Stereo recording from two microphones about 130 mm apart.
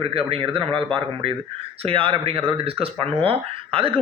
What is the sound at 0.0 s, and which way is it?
Speech, 45° right (ahead or behind).